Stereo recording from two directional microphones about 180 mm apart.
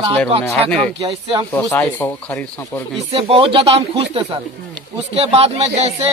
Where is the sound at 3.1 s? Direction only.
30° right (ahead or behind).